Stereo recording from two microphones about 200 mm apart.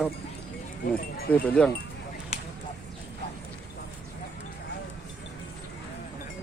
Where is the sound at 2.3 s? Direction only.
30° left (ahead or behind).